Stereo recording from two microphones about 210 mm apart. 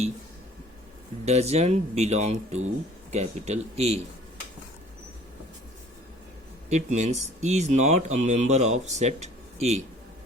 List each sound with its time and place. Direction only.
1.2 s speech: 30° right (ahead or behind)
6.7 s speech: 35° right (ahead or behind)